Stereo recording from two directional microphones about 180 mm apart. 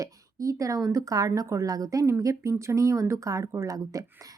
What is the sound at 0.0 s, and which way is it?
A woman's voice, 20° right (ahead or behind).